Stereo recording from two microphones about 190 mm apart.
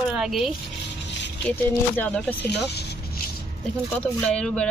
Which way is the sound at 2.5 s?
60° left (ahead or behind).